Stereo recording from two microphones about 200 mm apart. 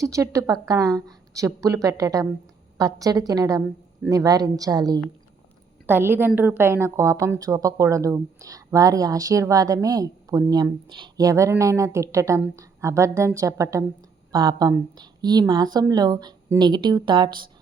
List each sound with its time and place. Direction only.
0.0 s a woman's voice: 15° right (ahead or behind)